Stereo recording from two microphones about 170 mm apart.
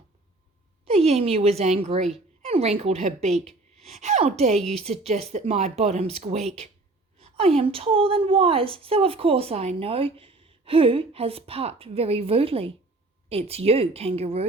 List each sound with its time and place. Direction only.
0.9 s a woman's voice: 35° right (ahead or behind)